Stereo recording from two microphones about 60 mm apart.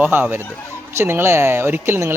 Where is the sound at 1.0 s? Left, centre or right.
Right.